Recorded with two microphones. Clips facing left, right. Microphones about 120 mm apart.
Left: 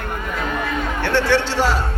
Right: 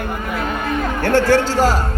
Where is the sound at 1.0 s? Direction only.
45° right (ahead or behind).